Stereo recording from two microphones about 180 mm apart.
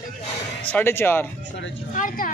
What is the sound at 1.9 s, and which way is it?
Speech, 50° left (ahead or behind).